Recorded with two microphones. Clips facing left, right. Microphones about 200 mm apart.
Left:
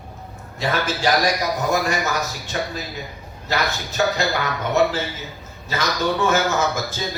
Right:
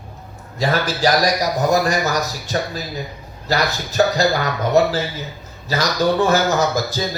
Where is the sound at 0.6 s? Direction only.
40° right (ahead or behind).